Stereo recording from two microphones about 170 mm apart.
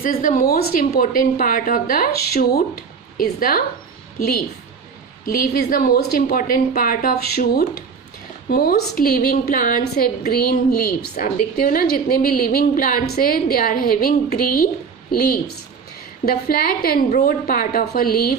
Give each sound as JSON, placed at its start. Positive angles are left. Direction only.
{"t": 0.0, "sound": "a woman's voice", "side_deg": 50}